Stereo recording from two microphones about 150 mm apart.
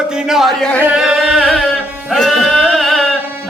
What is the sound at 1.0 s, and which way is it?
Carnatic music, centre (ahead or behind).